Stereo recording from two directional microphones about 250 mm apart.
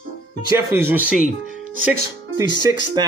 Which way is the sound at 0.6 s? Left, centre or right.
Centre.